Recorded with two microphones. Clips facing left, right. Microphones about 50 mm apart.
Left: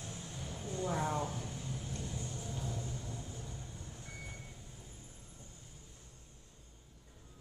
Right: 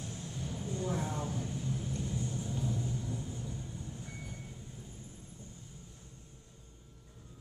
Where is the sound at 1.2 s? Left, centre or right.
Centre.